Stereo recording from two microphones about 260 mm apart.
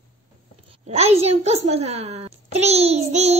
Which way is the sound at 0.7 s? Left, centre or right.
Right.